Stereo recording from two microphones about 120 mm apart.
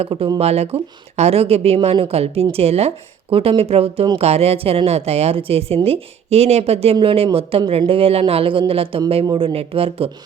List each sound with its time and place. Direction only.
0.1 s speech: 40° right (ahead or behind)
0.3 s speech: 60° right (ahead or behind)
6.9 s speech: 50° right (ahead or behind)